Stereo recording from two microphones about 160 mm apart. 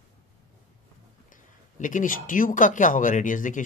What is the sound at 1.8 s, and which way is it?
Speech, 55° left (ahead or behind).